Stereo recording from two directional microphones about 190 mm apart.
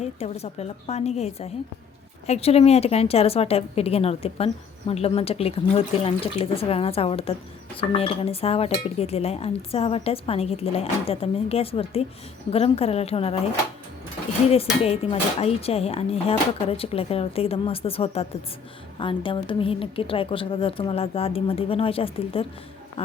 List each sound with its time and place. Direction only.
0.0 s a woman's voice: 35° left (ahead or behind)
14.5 s a woman's voice: 30° left (ahead or behind)